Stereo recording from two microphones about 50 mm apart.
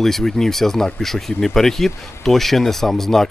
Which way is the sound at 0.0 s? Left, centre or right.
Centre.